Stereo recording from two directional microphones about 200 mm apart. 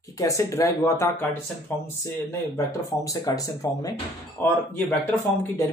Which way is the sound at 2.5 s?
15° left (ahead or behind).